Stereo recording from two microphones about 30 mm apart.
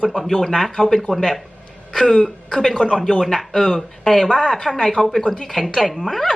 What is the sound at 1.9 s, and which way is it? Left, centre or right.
Speech, centre.